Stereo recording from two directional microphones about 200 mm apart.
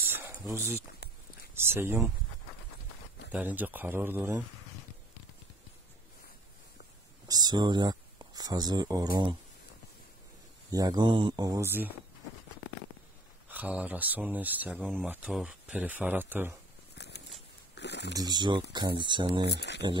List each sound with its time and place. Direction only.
0.1 s dog: 10° right (ahead or behind)
1.5 s speech: 10° right (ahead or behind)
3.3 s speech: 10° right (ahead or behind)
7.2 s speech: 20° right (ahead or behind)
10.7 s speech: 20° right (ahead or behind)
13.5 s speech: 10° right (ahead or behind)
17.0 s a sound: 60° left (ahead or behind)
18.1 s speech: 20° right (ahead or behind)
19.5 s speech: 60° left (ahead or behind)